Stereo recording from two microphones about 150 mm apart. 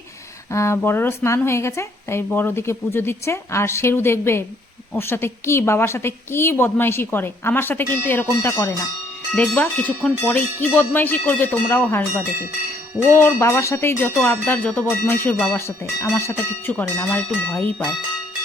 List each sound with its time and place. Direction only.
0.5 s speech: 20° left (ahead or behind)